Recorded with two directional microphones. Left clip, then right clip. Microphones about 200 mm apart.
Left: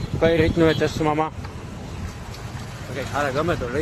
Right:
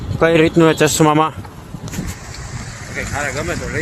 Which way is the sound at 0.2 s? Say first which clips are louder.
Right 6 dB; 35° right (ahead or behind).